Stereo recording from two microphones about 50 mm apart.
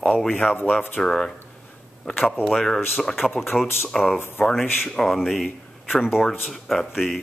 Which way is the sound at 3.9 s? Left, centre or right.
Centre.